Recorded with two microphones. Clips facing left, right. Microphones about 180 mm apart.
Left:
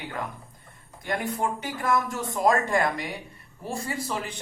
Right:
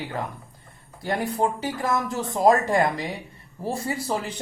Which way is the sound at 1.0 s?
35° right (ahead or behind).